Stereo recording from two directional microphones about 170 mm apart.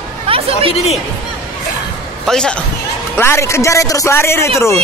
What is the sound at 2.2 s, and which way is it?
Speech, 5° left (ahead or behind).